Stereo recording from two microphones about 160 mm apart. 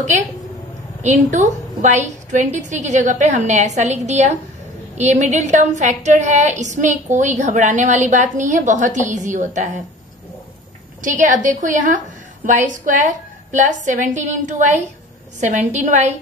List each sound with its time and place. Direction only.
0.0 s a woman's voice: 50° right (ahead or behind)
11.0 s a woman's voice: 55° right (ahead or behind)